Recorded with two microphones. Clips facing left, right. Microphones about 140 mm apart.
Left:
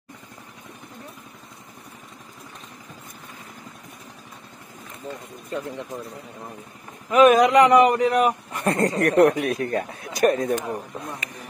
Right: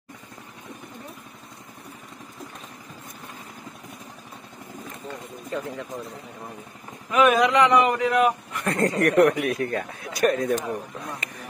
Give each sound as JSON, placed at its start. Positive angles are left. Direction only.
{"t": 7.2, "sound": "a man's voice", "side_deg": 40}